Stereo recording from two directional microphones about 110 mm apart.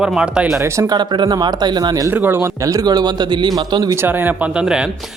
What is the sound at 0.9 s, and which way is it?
A man's voice, 40° right (ahead or behind).